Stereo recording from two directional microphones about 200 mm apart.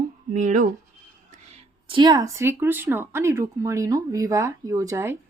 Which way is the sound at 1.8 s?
25° right (ahead or behind).